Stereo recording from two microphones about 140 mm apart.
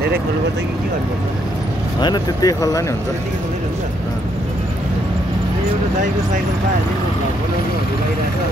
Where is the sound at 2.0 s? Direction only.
25° left (ahead or behind).